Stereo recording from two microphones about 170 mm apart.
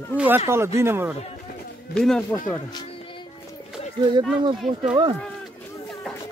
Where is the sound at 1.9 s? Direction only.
5° left (ahead or behind).